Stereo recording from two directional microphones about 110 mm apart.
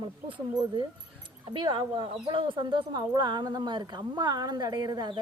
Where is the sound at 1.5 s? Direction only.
45° right (ahead or behind).